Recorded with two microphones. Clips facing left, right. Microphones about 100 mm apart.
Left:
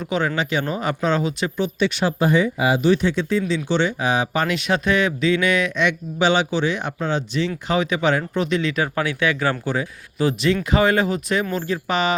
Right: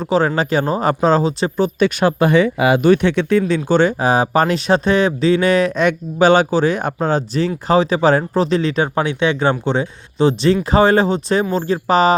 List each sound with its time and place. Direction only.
0.0 s speech: 35° right (ahead or behind)